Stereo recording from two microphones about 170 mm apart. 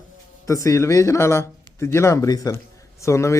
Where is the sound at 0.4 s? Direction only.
20° left (ahead or behind).